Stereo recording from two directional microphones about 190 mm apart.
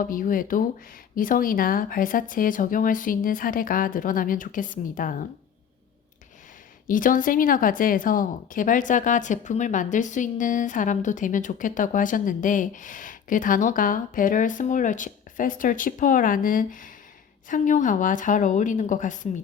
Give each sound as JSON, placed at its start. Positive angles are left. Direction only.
{"t": 0.0, "sound": "speech", "side_deg": 45}
{"t": 6.8, "sound": "speech", "side_deg": 45}